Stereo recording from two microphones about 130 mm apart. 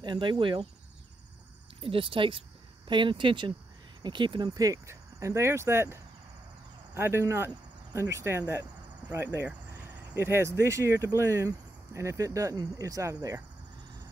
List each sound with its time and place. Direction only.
0.0 s speech: 35° right (ahead or behind)
1.8 s speech: 45° right (ahead or behind)
4.6 s speech: 25° right (ahead or behind)